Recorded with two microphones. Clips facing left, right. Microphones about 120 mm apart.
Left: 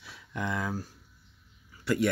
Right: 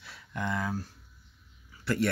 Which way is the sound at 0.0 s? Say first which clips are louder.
Even; 10° left (ahead or behind).